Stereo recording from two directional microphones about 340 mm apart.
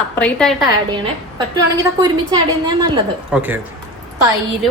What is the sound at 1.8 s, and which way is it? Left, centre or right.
A woman's voice, centre.